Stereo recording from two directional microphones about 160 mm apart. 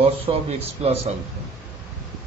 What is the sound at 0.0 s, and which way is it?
Speech, 40° right (ahead or behind).